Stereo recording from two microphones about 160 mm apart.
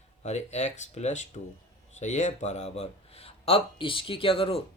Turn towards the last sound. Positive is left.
turn(degrees=35)  # may be behind; listen again after turning